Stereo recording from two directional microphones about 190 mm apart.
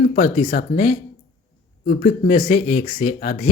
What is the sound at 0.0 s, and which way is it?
A man's voice, 40° left (ahead or behind).